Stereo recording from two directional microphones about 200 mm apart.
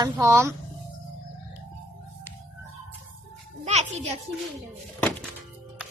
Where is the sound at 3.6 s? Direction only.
35° right (ahead or behind).